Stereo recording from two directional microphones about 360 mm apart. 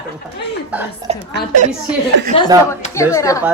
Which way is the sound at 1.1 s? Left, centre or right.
Centre.